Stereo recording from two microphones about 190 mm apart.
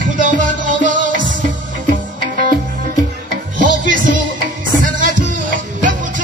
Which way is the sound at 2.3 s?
45° right (ahead or behind).